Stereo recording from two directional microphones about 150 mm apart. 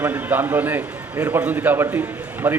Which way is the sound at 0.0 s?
15° right (ahead or behind).